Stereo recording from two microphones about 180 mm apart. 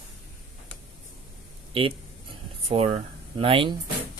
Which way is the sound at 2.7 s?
35° right (ahead or behind).